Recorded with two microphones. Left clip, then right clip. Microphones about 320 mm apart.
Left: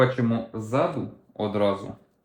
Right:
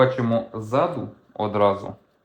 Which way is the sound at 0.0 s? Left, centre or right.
Centre.